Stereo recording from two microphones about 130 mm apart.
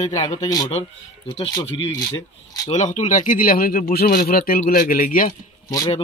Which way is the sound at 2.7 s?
65° left (ahead or behind).